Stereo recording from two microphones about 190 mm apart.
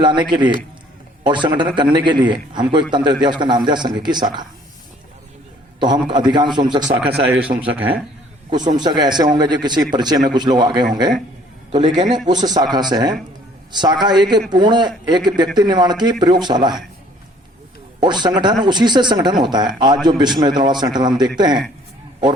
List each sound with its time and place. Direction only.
0.0 s a man's voice: 25° right (ahead or behind)
5.8 s a man's voice: 25° right (ahead or behind)
7.3 s speech: 10° right (ahead or behind)
8.7 s a man's voice: 20° right (ahead or behind)
18.0 s a man's voice: 25° right (ahead or behind)